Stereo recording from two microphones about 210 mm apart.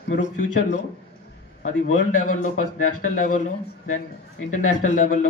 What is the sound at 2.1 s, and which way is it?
Speech, 40° left (ahead or behind).